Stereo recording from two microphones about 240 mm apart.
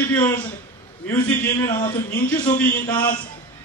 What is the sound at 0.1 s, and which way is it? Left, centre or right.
A man's voice, centre.